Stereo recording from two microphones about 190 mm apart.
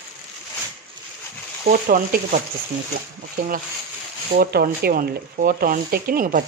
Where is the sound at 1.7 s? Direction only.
45° right (ahead or behind).